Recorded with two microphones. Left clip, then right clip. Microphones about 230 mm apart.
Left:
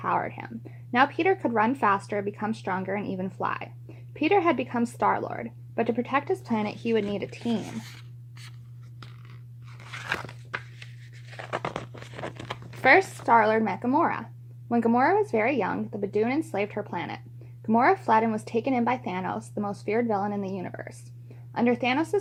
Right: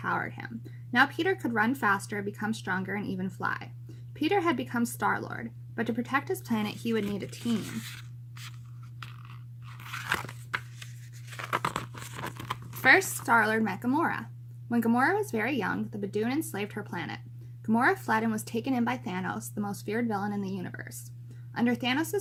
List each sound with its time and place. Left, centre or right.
0.0 s a woman's voice: centre
4.3 s a woman's voice: right
9.9 s a sound: centre
11.3 s tearing: centre
14.8 s a woman's voice: centre